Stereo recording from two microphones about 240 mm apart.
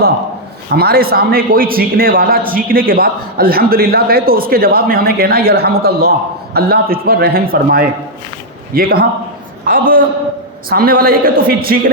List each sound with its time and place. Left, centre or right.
0.7 s a man's voice: right